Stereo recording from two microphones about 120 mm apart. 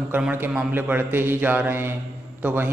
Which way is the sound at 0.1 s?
15° right (ahead or behind).